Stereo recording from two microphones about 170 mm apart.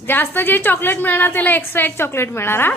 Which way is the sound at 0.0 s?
10° left (ahead or behind).